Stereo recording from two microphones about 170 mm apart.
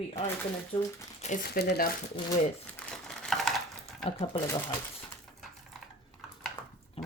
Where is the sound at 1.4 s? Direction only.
70° left (ahead or behind).